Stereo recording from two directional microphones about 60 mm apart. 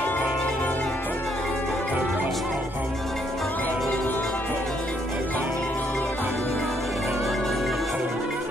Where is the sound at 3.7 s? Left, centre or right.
Centre.